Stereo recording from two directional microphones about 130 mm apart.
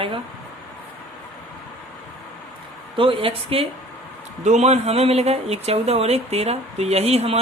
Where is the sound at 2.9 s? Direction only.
45° right (ahead or behind).